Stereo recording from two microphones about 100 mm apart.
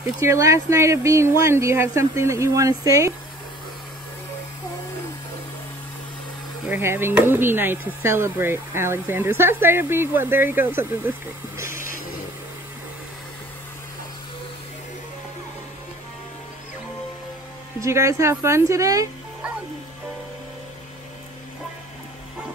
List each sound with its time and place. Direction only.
0.2 s speech: 30° right (ahead or behind)
6.7 s speech: 25° right (ahead or behind)
17.7 s a woman's voice: 30° right (ahead or behind)